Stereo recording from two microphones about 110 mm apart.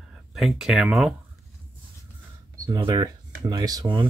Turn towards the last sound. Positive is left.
turn(degrees=-45)  # may be behind; listen again after turning